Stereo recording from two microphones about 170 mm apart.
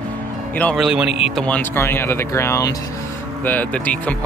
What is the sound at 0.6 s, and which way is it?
Speech, 5° left (ahead or behind).